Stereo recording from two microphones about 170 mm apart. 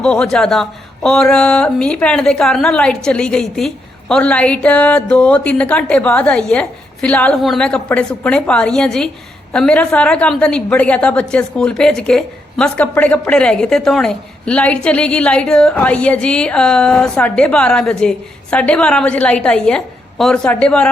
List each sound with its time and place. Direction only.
0.0 s a woman's voice: 5° left (ahead or behind)